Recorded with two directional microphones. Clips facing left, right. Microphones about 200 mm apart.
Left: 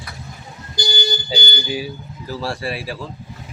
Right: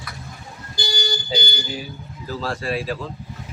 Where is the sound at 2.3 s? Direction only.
10° left (ahead or behind).